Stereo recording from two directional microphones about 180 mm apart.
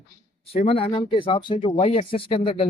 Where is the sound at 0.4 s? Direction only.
30° left (ahead or behind).